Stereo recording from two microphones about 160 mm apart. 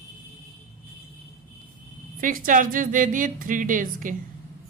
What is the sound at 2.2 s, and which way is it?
Speech, 55° right (ahead or behind).